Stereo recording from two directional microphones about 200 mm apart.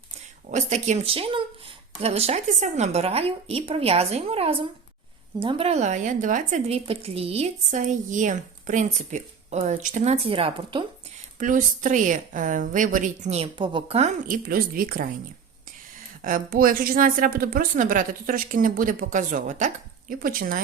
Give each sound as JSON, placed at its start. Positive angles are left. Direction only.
{"t": 0.5, "sound": "speech", "side_deg": -35}
{"t": 11.3, "sound": "speech", "side_deg": -40}
{"t": 16.2, "sound": "a woman's voice", "side_deg": -45}